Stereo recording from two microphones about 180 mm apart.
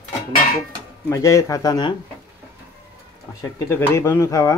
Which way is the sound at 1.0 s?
15° left (ahead or behind).